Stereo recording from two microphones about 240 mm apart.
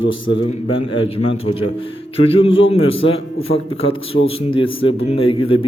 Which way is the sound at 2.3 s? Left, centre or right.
Left.